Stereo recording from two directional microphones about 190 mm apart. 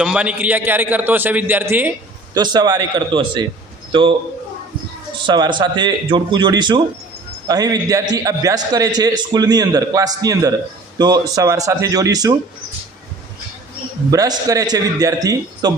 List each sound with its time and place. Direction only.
0.0 s a man's voice: 5° right (ahead or behind)
2.3 s a man's voice: 20° right (ahead or behind)
5.2 s a man's voice: 25° right (ahead or behind)
14.1 s a man's voice: 20° right (ahead or behind)